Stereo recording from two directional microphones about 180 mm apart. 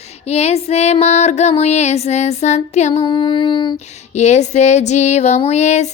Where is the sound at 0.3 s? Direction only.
35° left (ahead or behind).